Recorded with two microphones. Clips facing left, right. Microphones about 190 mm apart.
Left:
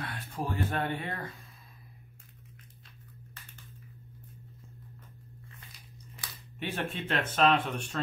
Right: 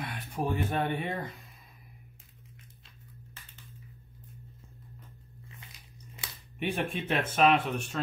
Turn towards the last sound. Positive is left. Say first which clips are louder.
# right 1 dB
turn(degrees=-5)  # may be behind; listen again after turning